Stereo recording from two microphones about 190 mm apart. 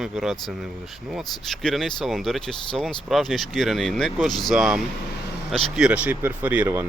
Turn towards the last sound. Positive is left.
turn(degrees=-10)  # may be behind; listen again after turning